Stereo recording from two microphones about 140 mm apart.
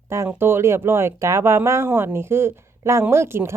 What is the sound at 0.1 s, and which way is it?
Speech, 20° right (ahead or behind).